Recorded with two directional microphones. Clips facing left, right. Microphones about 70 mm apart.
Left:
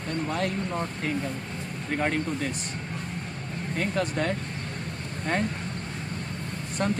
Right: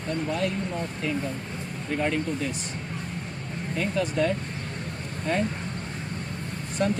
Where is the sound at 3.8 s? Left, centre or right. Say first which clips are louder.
Right 2 dB; left.